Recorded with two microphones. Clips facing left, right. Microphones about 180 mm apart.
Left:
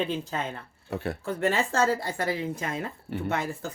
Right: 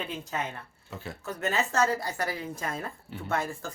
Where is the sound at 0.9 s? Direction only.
65° left (ahead or behind).